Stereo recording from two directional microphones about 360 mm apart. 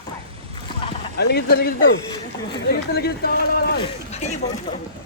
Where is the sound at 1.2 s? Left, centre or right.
Left.